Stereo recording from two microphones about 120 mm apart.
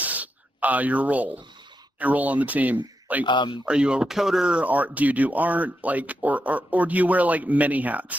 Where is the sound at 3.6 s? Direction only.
10° right (ahead or behind).